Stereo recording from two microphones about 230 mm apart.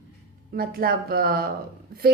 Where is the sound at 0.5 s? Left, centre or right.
Right.